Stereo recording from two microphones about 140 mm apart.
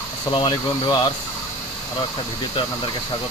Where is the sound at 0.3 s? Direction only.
35° left (ahead or behind).